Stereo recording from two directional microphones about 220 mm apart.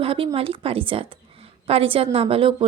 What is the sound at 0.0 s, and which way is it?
A woman's voice, 25° right (ahead or behind).